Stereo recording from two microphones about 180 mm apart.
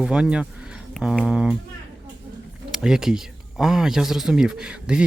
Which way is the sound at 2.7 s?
5° right (ahead or behind).